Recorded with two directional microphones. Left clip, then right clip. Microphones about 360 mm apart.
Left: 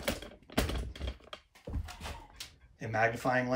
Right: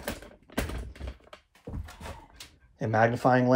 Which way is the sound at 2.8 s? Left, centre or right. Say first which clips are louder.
Right 6 dB; centre.